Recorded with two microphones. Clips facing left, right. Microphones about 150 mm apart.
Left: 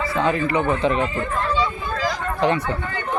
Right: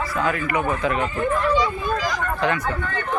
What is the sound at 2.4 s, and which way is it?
Speech, 30° left (ahead or behind).